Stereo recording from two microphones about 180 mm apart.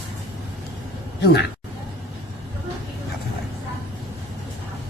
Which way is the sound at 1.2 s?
70° left (ahead or behind).